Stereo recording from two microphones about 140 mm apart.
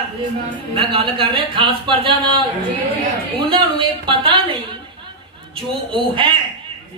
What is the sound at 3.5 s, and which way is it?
Speech, 35° right (ahead or behind).